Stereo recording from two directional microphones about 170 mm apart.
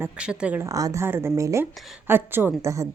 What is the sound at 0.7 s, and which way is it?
Speech, 20° right (ahead or behind).